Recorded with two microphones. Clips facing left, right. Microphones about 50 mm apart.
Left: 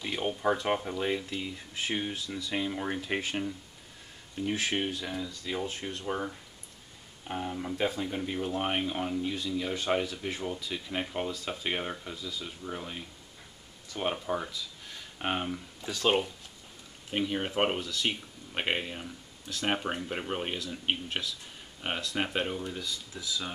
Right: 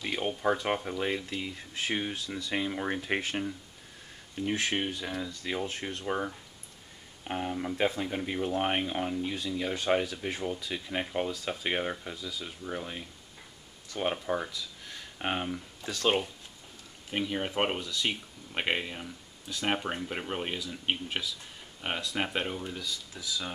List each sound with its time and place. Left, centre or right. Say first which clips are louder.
0.0 s speech: even; centre
4.4 s speech: even; centre
5.2 s speech: right 1 dB; right
6.0 s speech: right 2 dB; centre
7.4 s speech: right 2 dB; centre
17.1 s speech: left 1 dB; centre